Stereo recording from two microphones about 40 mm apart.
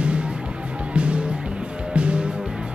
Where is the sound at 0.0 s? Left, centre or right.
Right.